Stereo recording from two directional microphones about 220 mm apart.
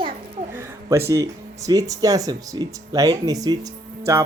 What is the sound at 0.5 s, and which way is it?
A child's voice, 10° right (ahead or behind).